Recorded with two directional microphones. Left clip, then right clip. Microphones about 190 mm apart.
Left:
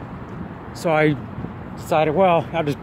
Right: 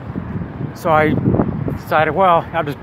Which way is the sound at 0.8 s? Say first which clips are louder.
Right 4 dB; 15° left (ahead or behind).